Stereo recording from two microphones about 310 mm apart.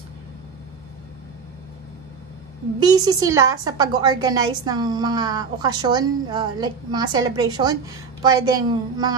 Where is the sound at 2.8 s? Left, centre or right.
Centre.